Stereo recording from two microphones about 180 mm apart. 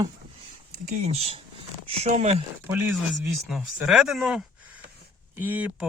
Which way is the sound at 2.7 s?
10° right (ahead or behind).